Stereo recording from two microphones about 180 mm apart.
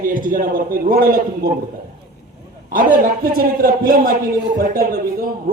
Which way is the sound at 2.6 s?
50° right (ahead or behind).